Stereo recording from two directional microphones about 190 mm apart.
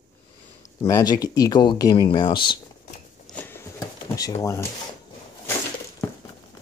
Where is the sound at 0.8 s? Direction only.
20° left (ahead or behind).